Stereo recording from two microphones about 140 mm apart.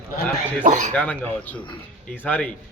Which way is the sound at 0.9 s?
10° left (ahead or behind).